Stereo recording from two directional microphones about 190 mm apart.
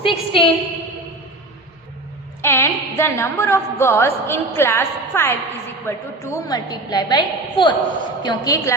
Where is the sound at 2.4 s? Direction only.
15° left (ahead or behind).